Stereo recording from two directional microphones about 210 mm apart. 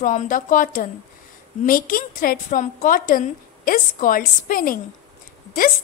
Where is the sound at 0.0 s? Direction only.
35° left (ahead or behind).